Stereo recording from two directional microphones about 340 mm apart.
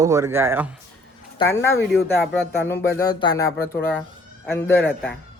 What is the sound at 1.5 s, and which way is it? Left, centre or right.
Speech, centre.